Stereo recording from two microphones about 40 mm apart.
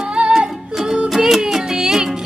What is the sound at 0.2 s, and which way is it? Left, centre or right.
Music, right.